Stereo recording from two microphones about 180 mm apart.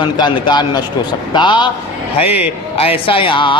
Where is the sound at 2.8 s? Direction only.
30° left (ahead or behind).